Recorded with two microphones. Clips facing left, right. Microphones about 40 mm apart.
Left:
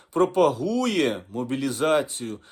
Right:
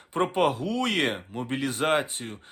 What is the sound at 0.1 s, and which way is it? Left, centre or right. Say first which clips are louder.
Speech: left 4 dB; right.